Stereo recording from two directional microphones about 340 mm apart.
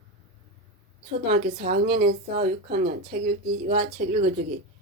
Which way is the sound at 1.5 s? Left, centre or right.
Right.